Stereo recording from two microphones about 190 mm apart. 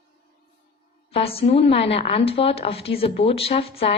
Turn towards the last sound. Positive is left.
turn(degrees=30)  # may be behind; listen again after turning